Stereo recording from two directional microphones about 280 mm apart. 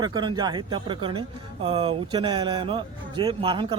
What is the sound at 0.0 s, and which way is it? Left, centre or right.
Speech, centre.